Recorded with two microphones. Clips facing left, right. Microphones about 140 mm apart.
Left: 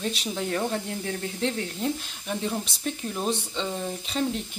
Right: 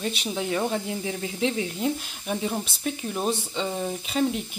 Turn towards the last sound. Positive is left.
turn(degrees=-10)  # may be behind; listen again after turning